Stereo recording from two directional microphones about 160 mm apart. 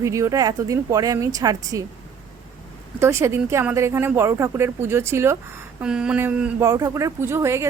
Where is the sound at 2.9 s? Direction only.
15° right (ahead or behind).